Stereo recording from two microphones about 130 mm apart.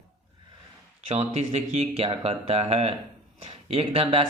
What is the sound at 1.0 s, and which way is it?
Speech, 55° right (ahead or behind).